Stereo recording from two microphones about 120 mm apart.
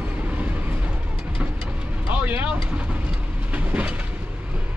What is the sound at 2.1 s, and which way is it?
Vehicle, 15° right (ahead or behind).